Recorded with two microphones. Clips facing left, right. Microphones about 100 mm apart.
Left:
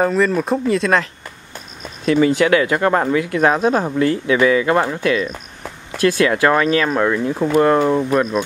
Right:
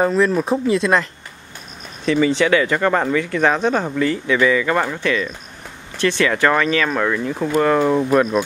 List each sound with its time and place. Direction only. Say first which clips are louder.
0.0 s speech: even; centre (ahead or behind)
2.1 s speech: left 2 dB; 10° left (ahead or behind)
6.3 s speech: left 2 dB; 10° left (ahead or behind)
6.6 s speech: left 2 dB; 20° left (ahead or behind); by 8.5 s 5° right (ahead or behind)